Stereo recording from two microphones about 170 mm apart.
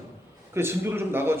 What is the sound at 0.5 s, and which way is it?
Speech, 15° right (ahead or behind).